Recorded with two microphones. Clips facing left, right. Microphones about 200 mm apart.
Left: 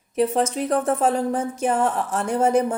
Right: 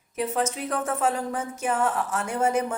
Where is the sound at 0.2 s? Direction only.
35° left (ahead or behind).